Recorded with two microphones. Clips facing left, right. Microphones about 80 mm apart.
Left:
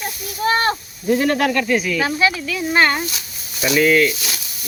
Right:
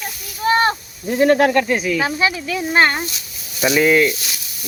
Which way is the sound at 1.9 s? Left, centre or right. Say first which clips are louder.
Even; centre.